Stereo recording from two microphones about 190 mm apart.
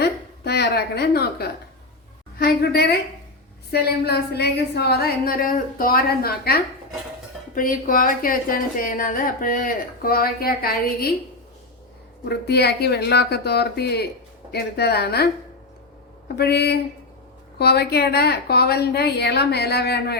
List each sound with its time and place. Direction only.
0.0 s a woman's voice: 60° left (ahead or behind)
12.3 s a woman's voice: 60° left (ahead or behind)
16.3 s a woman's voice: 60° left (ahead or behind)